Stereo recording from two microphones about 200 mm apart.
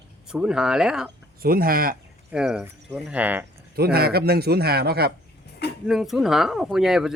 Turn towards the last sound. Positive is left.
turn(degrees=0)  # may be behind; listen again after turning